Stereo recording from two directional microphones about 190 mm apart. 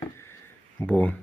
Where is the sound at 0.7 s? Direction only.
5° left (ahead or behind).